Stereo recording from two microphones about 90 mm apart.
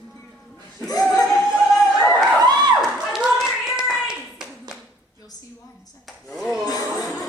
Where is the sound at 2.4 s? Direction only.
50° right (ahead or behind).